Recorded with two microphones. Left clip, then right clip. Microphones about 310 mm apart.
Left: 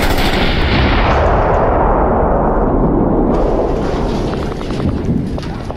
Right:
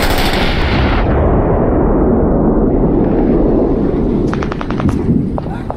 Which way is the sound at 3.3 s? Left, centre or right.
Left.